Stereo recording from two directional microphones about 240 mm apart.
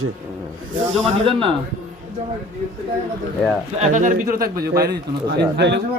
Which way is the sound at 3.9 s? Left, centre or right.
Right.